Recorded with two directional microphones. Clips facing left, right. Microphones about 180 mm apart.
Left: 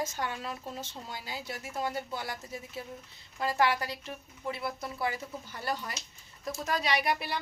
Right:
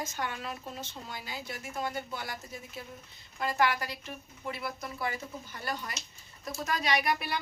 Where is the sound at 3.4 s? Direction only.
30° left (ahead or behind).